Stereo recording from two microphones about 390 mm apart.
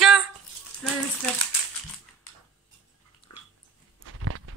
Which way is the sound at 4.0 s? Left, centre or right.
Right.